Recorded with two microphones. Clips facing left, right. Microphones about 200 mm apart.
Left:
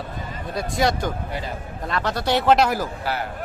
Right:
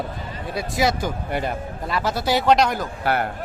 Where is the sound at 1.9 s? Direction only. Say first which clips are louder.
Even; 5° right (ahead or behind).